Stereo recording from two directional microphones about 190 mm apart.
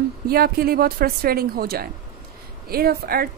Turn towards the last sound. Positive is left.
turn(degrees=-50)  # may be behind; listen again after turning